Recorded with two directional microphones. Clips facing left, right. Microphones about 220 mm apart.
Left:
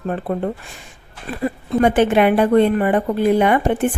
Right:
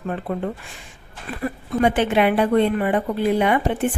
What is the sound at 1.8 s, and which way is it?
Speech, 45° left (ahead or behind).